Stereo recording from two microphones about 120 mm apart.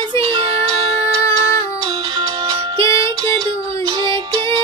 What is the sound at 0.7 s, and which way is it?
Music, 55° right (ahead or behind).